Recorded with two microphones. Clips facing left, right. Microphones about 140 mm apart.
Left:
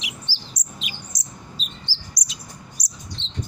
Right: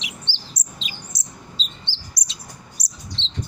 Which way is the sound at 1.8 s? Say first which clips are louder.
Left 1 dB; 25° right (ahead or behind).